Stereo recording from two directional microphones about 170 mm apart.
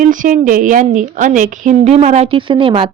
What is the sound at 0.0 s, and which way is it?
A woman's voice, 50° right (ahead or behind).